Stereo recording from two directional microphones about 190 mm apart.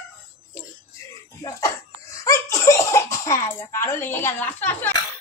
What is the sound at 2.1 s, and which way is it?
Cough, 15° left (ahead or behind).